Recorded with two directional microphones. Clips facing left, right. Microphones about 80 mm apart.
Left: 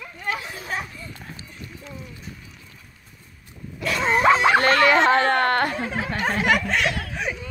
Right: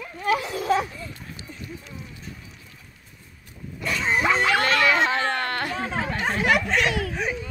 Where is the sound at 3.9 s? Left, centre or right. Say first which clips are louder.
Left 5 dB; left.